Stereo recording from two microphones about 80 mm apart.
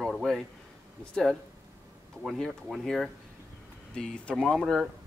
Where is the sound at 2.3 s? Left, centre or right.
Centre.